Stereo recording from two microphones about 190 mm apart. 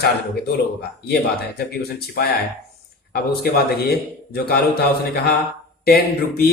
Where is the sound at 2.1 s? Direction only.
55° left (ahead or behind).